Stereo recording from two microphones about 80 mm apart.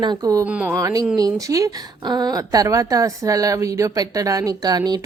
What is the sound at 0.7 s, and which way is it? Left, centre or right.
Speech, right.